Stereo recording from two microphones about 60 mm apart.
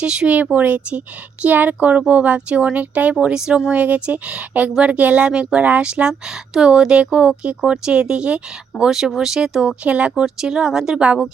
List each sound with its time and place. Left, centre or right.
0.0 s speech: centre
10.2 s speech: centre